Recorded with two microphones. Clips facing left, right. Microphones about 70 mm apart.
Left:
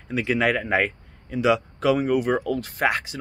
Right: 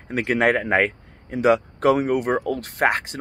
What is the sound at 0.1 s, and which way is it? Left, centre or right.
Speech, right.